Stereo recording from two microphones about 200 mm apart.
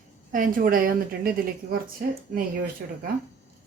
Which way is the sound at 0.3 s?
40° right (ahead or behind).